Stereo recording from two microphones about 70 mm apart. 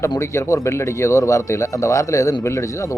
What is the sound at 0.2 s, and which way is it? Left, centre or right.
A man's voice, left.